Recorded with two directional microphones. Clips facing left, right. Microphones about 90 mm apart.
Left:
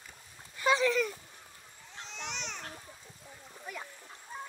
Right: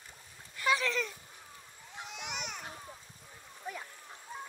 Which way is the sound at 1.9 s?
10° right (ahead or behind).